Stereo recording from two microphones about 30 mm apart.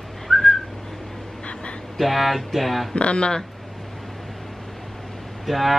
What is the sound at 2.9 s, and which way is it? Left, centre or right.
Speech, left.